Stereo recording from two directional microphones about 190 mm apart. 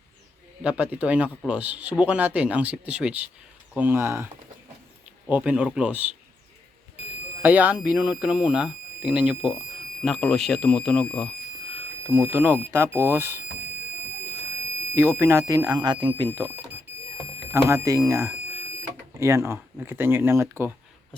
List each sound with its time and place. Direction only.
0.6 s speech: 5° right (ahead or behind)
5.3 s speech: 5° right (ahead or behind)
7.4 s speech: 10° right (ahead or behind)
12.0 s speech: 10° right (ahead or behind)
14.9 s speech: 15° right (ahead or behind)
17.5 s speech: 15° right (ahead or behind)